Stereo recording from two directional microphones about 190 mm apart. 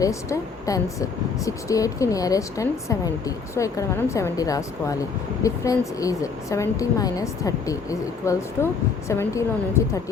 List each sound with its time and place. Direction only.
0.0 s speech: 15° left (ahead or behind)